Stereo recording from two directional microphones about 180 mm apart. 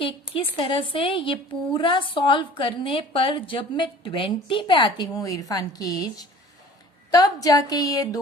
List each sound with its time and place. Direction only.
0.0 s a woman's voice: 30° left (ahead or behind)